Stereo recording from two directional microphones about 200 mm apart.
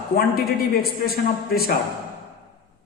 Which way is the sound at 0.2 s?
50° left (ahead or behind).